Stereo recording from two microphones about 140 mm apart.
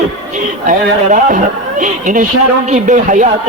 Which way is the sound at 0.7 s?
65° right (ahead or behind).